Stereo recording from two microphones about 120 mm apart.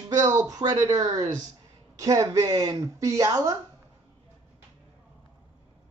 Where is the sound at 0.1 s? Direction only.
30° right (ahead or behind).